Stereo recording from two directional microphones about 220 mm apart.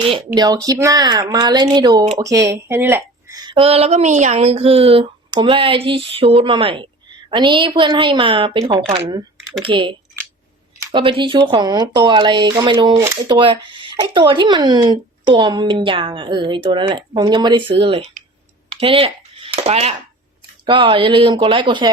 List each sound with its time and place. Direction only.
0.3 s speech: 15° right (ahead or behind)
9.0 s typing: 20° right (ahead or behind)
9.6 s speech: 25° right (ahead or behind)
10.9 s speech: 20° right (ahead or behind)
18.7 s a sound: 25° right (ahead or behind)
20.7 s speech: 20° right (ahead or behind)